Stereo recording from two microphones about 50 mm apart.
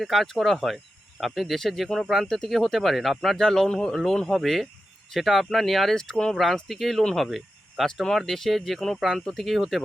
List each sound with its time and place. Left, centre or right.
0.0 s speech: centre
7.3 s a sound: centre
8.3 s speech: centre